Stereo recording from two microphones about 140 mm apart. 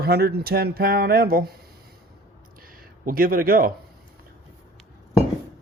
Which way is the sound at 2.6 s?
90° right.